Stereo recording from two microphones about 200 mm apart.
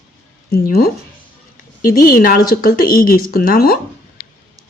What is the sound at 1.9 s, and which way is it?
Speech, 45° left (ahead or behind).